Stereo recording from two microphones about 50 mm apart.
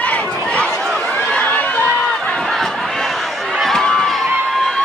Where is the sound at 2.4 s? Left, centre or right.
Centre.